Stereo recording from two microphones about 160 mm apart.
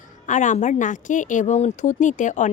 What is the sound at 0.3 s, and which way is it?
A woman's voice, 50° left (ahead or behind).